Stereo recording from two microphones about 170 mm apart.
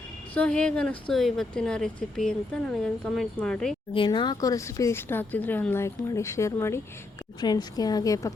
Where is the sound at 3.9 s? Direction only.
30° left (ahead or behind).